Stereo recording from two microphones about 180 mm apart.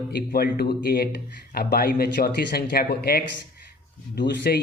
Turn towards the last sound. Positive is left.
turn(degrees=60)  # may be behind; listen again after turning